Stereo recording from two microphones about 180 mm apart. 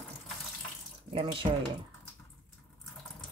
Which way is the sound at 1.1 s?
30° right (ahead or behind).